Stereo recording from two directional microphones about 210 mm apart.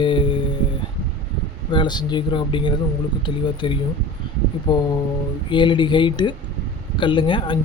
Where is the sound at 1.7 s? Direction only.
20° left (ahead or behind).